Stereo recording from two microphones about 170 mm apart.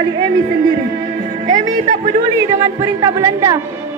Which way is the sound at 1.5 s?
50° right (ahead or behind).